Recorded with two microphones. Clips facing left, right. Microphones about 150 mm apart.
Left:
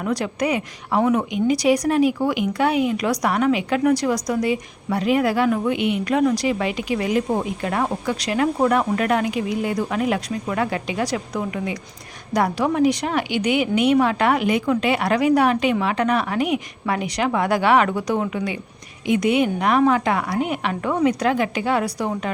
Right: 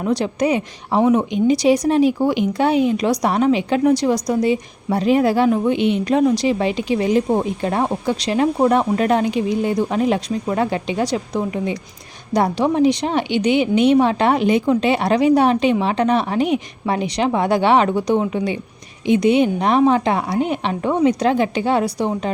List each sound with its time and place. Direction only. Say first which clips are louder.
0.0 s a woman's voice: right 4 dB; 25° right (ahead or behind)